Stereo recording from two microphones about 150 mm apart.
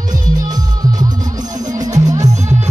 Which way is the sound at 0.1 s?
25° right (ahead or behind).